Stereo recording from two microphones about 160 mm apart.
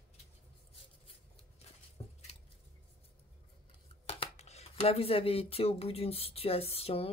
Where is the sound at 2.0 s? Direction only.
25° left (ahead or behind).